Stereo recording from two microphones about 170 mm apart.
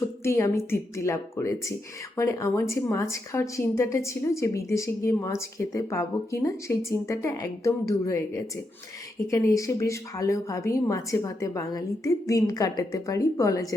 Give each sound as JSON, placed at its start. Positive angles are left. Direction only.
{"t": 0.2, "sound": "a woman's voice", "side_deg": 15}
{"t": 9.2, "sound": "speech", "side_deg": 20}